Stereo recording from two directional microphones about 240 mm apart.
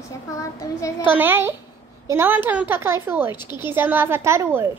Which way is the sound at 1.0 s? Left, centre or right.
Centre.